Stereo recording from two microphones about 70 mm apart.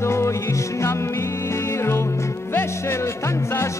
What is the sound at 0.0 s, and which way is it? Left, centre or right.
Music, left.